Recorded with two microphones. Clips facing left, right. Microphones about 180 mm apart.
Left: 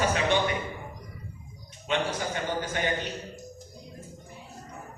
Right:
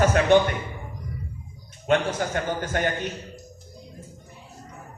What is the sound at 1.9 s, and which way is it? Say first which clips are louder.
A man's voice: right 6 dB; 50° right (ahead or behind).